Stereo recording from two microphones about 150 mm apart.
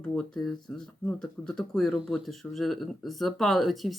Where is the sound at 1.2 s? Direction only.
5° left (ahead or behind).